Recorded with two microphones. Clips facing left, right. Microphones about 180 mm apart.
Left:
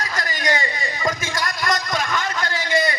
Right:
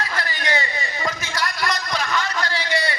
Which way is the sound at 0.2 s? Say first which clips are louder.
Left 3 dB; 45° left (ahead or behind).